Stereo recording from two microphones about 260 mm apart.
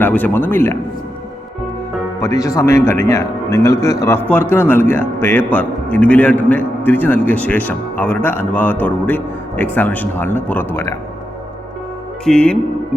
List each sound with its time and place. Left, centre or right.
0.0 s a man's voice: centre
2.2 s a man's voice: centre
12.2 s speech: centre